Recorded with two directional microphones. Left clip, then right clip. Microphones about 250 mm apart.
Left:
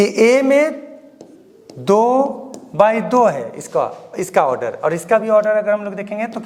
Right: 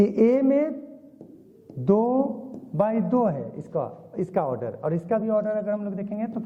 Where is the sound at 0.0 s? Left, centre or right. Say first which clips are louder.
Left 8 dB; centre.